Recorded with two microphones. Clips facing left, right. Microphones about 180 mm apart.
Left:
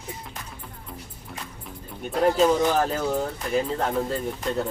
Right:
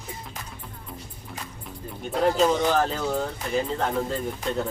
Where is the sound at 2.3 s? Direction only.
5° left (ahead or behind).